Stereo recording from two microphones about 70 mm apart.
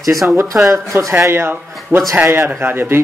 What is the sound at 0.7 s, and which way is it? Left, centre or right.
Speech, right.